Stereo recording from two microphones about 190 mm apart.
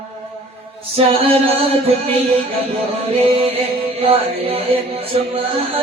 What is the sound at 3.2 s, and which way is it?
Music, 30° right (ahead or behind).